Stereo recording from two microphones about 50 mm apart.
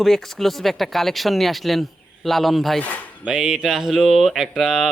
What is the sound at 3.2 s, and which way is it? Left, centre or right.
Speech, centre.